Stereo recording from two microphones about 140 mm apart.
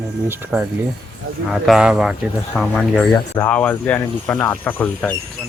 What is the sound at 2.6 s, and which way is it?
Speech, 10° left (ahead or behind).